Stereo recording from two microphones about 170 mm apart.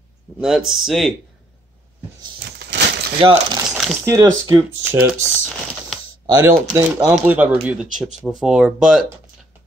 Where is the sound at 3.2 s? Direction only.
30° right (ahead or behind).